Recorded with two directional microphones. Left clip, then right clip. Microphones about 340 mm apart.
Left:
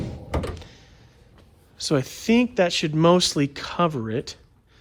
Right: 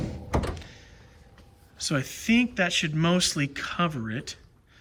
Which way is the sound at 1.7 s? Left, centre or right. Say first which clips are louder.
Left 5 dB; centre.